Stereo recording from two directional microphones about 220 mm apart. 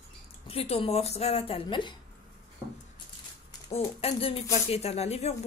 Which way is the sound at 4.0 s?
25° left (ahead or behind).